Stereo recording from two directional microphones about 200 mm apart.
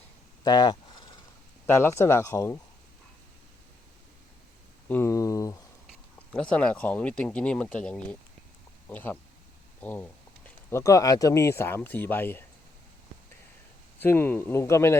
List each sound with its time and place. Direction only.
0.4 s a sound: 20° left (ahead or behind)
1.6 s speech: 10° left (ahead or behind)
4.9 s speech: 10° left (ahead or behind)
6.1 s speech: 5° left (ahead or behind)
14.0 s speech: 10° left (ahead or behind)